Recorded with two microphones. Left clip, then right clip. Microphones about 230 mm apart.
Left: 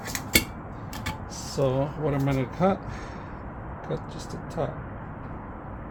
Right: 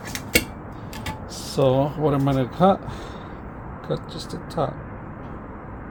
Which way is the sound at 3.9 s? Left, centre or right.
Right.